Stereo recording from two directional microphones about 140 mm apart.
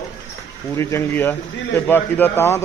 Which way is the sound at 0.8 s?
20° left (ahead or behind).